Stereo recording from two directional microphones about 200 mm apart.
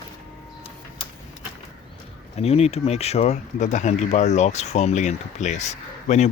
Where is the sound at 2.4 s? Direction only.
30° left (ahead or behind).